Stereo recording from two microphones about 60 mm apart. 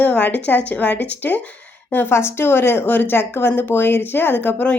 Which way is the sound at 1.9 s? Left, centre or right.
Left.